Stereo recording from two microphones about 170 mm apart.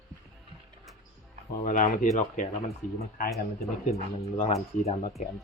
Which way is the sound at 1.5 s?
50° left (ahead or behind).